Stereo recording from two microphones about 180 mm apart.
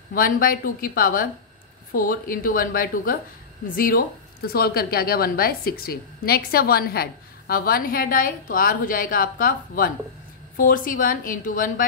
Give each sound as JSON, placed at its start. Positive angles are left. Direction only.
{"t": 0.1, "sound": "a woman's voice", "side_deg": 50}